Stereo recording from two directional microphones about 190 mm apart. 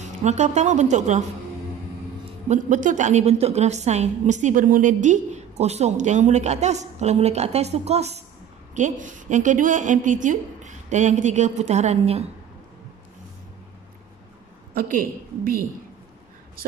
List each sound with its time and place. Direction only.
0.0 s a woman's voice: 35° right (ahead or behind)
2.4 s a woman's voice: 40° right (ahead or behind)
14.7 s a woman's voice: 50° right (ahead or behind)